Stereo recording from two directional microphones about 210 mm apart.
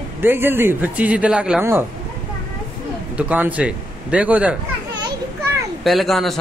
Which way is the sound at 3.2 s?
5° right (ahead or behind).